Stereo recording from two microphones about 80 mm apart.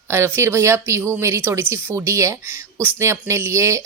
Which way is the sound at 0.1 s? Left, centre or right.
Right.